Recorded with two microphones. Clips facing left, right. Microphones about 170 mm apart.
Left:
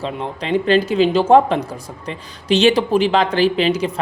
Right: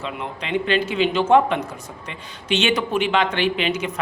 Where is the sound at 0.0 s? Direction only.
35° left (ahead or behind).